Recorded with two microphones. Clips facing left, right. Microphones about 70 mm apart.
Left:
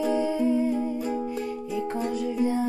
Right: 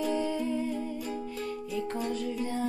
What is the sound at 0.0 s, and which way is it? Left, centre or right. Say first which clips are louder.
Humming: left 6 dB; centre.